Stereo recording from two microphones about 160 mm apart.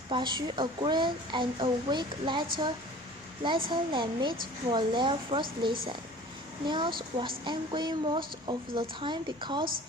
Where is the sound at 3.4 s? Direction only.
30° right (ahead or behind).